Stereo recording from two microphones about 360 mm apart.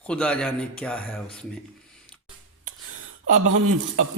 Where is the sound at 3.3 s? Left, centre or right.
Right.